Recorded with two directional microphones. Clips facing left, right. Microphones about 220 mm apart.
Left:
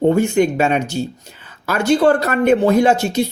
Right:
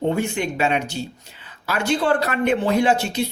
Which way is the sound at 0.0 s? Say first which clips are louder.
Left 8 dB; 45° left (ahead or behind).